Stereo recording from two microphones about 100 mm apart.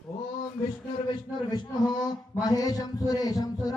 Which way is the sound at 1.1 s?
45° left (ahead or behind).